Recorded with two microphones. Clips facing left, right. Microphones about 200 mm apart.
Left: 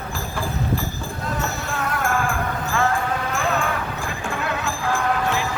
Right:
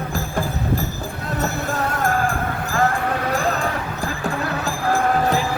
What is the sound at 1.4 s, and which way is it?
Basketball bounce, 40° right (ahead or behind).